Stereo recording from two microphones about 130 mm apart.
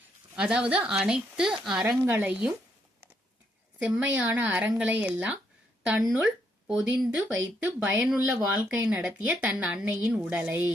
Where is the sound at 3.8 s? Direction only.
10° right (ahead or behind).